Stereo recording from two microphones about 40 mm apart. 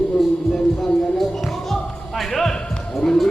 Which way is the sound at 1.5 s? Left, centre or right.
Centre.